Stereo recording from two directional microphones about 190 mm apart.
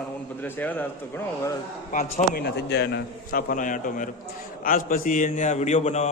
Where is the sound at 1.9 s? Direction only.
45° left (ahead or behind).